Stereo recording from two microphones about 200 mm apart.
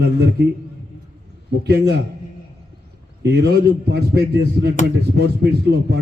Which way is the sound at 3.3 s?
50° right (ahead or behind).